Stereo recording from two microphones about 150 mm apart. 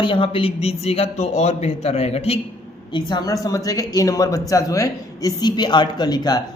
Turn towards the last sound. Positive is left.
turn(degrees=25)  # may be behind; listen again after turning